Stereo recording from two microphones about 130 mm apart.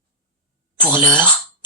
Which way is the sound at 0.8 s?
15° right (ahead or behind).